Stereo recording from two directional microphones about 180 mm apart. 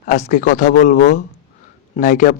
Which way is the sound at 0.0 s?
45° left (ahead or behind).